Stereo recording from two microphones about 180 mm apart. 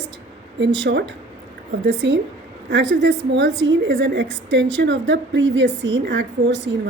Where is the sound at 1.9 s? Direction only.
75° right (ahead or behind).